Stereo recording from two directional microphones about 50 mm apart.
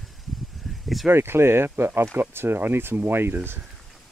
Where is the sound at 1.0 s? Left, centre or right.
Right.